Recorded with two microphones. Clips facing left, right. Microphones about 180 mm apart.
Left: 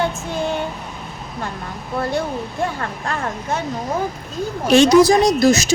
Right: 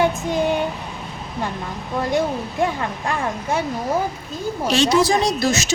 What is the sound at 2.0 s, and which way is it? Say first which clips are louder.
Speech: right 1 dB; 15° right (ahead or behind).